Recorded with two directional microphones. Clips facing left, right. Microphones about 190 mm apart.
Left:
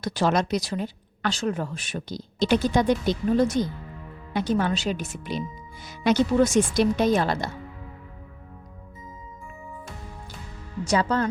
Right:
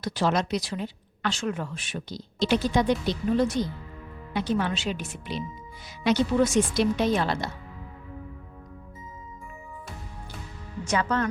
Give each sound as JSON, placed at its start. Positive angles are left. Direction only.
{"t": 0.0, "sound": "a woman's voice", "side_deg": 45}
{"t": 10.8, "sound": "speech", "side_deg": 35}